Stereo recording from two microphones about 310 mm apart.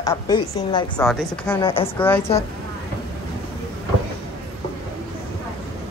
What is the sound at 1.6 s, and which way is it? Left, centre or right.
Speech, centre.